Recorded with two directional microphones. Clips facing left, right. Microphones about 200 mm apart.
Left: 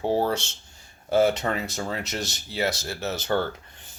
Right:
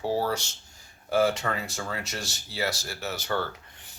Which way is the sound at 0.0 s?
25° left (ahead or behind).